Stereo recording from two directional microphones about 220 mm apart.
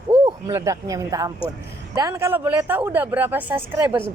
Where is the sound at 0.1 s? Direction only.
15° right (ahead or behind).